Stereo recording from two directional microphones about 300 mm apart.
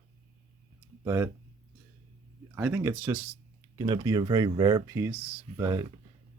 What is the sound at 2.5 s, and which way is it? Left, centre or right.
Speech, centre.